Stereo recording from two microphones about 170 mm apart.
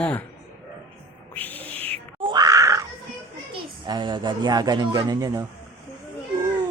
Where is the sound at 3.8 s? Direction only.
25° right (ahead or behind).